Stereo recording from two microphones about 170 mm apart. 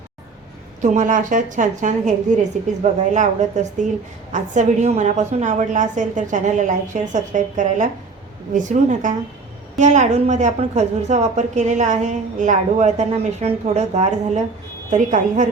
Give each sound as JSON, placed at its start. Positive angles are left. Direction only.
{"t": 0.8, "sound": "a woman's voice", "side_deg": -45}